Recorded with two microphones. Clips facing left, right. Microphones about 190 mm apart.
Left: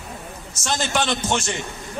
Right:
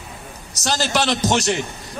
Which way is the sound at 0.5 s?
35° right (ahead or behind).